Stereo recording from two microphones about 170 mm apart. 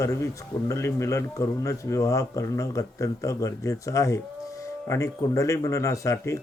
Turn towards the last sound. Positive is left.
turn(degrees=15)  # may be behind; listen again after turning